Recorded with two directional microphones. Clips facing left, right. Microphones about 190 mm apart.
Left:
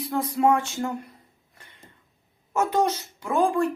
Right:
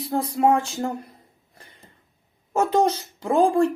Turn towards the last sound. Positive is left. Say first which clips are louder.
# right 4 dB
turn(degrees=-30)  # may be behind; listen again after turning